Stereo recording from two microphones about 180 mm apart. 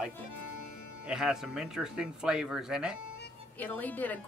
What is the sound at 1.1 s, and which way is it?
Speech, 5° right (ahead or behind).